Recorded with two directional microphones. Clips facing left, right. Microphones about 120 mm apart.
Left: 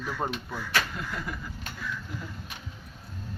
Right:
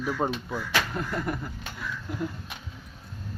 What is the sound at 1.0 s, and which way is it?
Speech, 50° right (ahead or behind).